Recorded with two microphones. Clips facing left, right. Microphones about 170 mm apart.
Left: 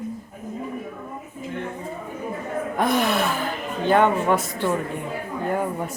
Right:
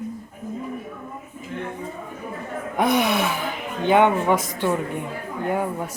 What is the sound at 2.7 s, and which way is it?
Speech, 15° right (ahead or behind).